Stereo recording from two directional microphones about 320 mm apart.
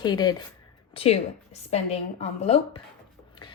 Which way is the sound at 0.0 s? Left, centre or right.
Centre.